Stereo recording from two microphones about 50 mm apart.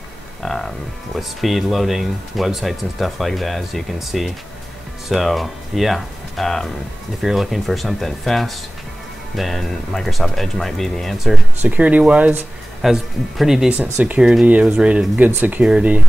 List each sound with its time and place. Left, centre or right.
0.4 s speech: centre
7.2 s speech: centre
11.6 s speech: right
12.8 s speech: centre
14.0 s speech: right
15.1 s speech: right